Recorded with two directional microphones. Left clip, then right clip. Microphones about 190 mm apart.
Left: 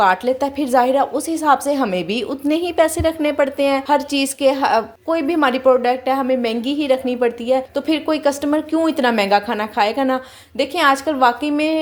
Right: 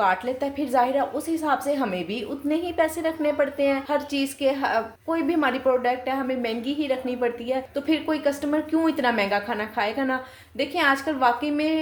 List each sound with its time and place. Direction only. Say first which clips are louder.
0.0 s a woman's voice: left 7 dB; 45° left (ahead or behind)